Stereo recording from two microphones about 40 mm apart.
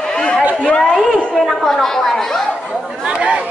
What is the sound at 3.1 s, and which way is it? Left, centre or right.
Chatter, right.